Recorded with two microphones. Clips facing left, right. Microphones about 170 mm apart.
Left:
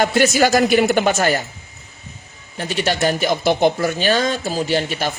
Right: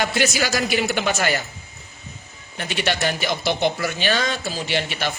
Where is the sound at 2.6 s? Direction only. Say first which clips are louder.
Left 4 dB; 40° left (ahead or behind).